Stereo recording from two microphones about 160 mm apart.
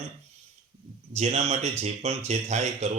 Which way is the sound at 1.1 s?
40° right (ahead or behind).